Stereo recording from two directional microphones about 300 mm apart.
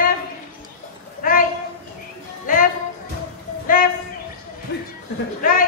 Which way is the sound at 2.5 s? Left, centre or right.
Left.